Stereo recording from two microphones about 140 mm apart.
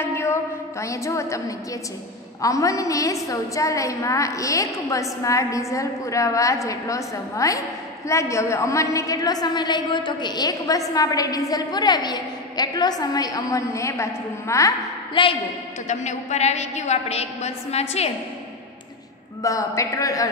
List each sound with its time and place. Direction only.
0.0 s a sound: 20° left (ahead or behind)
2.4 s a woman's voice: 25° left (ahead or behind)
15.2 s a woman's voice: 35° left (ahead or behind)
15.9 s a woman's voice: 55° left (ahead or behind)
19.4 s a woman's voice: 25° left (ahead or behind)